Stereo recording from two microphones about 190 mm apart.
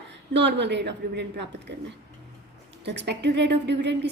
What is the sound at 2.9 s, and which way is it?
A woman's voice, 65° right (ahead or behind).